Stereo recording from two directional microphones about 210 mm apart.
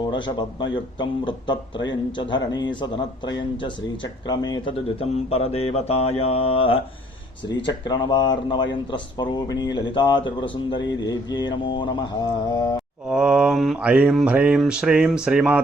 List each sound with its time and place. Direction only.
0.1 s speech: 20° left (ahead or behind)
13.1 s mantra: 5° right (ahead or behind)